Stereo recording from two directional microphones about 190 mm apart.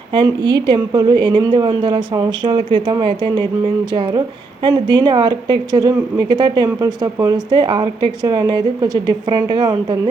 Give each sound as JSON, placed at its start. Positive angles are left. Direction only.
{"t": 0.1, "sound": "speech", "side_deg": -25}